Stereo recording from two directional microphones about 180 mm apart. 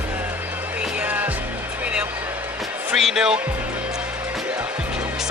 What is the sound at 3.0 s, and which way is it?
Speech, centre (ahead or behind).